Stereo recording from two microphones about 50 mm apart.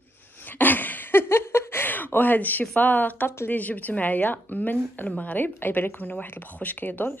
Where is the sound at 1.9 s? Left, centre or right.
Left.